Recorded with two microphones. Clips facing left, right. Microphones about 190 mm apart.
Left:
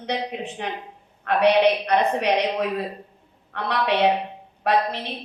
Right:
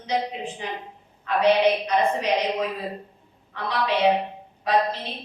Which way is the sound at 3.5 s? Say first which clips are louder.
Left 2 dB; 65° left (ahead or behind).